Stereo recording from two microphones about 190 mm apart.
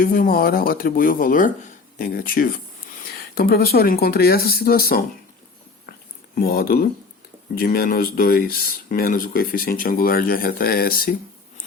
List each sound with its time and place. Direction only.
0.0 s speech: 50° left (ahead or behind)
6.3 s speech: 55° left (ahead or behind)